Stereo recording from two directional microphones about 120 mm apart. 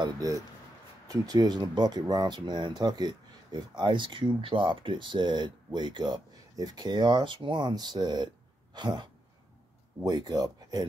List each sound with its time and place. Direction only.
0.0 s speech: 30° right (ahead or behind)